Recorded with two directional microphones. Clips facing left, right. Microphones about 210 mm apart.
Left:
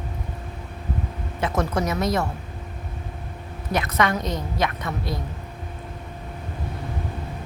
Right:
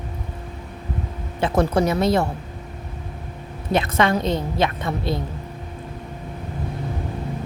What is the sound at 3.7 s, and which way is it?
A woman's voice, 25° right (ahead or behind).